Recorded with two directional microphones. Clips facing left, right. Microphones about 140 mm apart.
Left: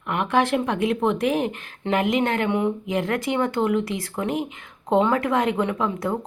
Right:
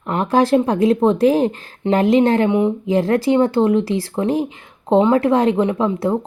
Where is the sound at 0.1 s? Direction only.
35° right (ahead or behind).